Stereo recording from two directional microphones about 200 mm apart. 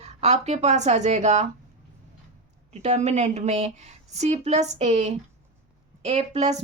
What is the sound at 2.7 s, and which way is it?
A woman's voice, 35° right (ahead or behind).